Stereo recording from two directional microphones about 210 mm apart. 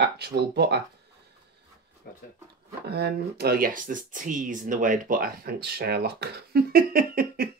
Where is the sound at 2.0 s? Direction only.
45° left (ahead or behind).